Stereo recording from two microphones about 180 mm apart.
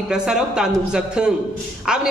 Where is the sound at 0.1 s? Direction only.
5° right (ahead or behind).